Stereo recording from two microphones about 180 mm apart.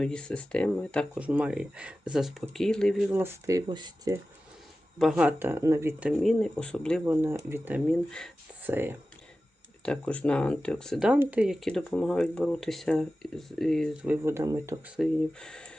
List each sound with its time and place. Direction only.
0.0 s speech: 5° left (ahead or behind)
1.2 s speech: 5° right (ahead or behind)
3.1 s speech: 10° right (ahead or behind)
4.9 s speech: 5° right (ahead or behind)
6.1 s speech: centre (ahead or behind)
7.0 s speech: 10° right (ahead or behind)
7.9 s speech: 5° left (ahead or behind)
8.6 s speech: 10° right (ahead or behind)
9.8 s speech: 5° left (ahead or behind); by 14.9 s 15° right (ahead or behind)
14.9 s speech: 5° left (ahead or behind)